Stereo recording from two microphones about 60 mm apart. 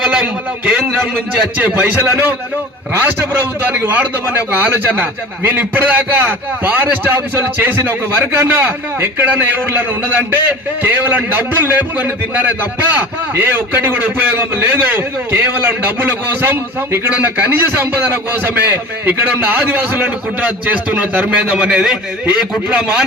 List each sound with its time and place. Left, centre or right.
1.5 s a man's voice: right